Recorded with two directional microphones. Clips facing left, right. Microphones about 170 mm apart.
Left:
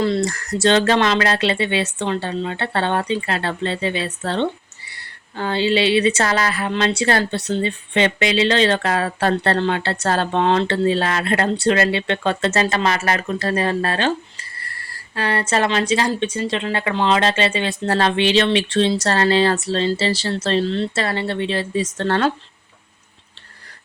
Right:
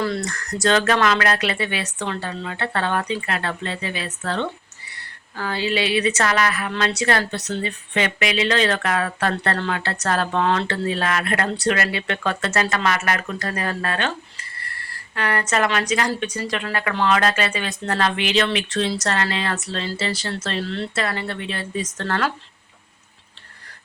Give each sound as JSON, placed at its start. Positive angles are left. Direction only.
{"t": 0.0, "sound": "speech", "side_deg": 25}
{"t": 15.1, "sound": "speech", "side_deg": 30}